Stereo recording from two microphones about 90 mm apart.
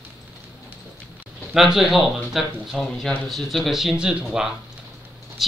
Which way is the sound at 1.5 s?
5° right (ahead or behind).